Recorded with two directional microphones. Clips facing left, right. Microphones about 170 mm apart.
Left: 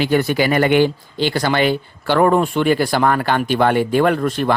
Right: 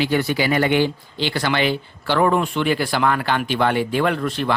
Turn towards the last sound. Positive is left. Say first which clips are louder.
# left 4 dB
turn(degrees=45)  # may be behind; listen again after turning